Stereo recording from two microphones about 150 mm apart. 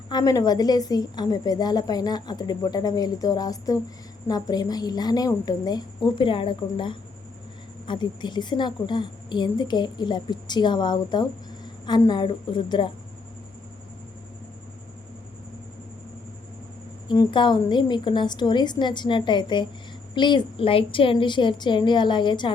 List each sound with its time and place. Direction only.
0.1 s a woman's voice: 25° left (ahead or behind)
17.1 s a woman's voice: 30° left (ahead or behind)